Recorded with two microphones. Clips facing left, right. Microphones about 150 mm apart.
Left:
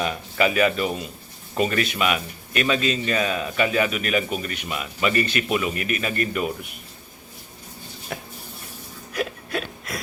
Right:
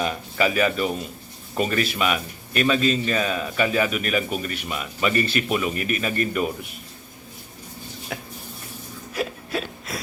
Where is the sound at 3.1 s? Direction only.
Centre (ahead or behind).